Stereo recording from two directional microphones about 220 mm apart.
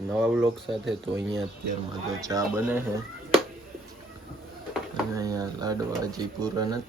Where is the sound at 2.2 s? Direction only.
10° right (ahead or behind).